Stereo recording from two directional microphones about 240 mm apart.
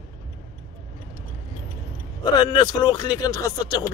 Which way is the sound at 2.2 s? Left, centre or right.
Centre.